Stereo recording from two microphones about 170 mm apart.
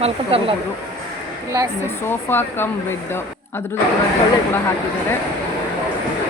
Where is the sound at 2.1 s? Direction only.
15° left (ahead or behind).